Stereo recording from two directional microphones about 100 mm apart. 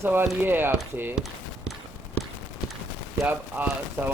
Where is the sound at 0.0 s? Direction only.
20° right (ahead or behind).